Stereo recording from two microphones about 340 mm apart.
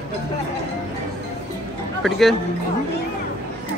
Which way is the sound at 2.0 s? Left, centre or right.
Centre.